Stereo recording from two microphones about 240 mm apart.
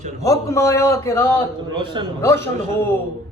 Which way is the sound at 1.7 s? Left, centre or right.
Centre.